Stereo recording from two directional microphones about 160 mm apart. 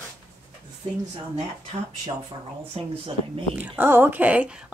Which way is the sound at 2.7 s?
35° right (ahead or behind).